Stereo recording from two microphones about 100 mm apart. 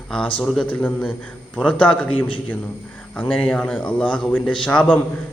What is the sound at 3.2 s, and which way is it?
A man's voice, 10° left (ahead or behind).